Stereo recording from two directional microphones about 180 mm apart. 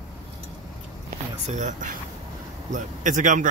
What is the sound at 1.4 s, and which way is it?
Speech, 40° right (ahead or behind).